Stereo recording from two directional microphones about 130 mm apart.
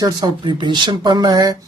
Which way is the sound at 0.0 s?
35° right (ahead or behind).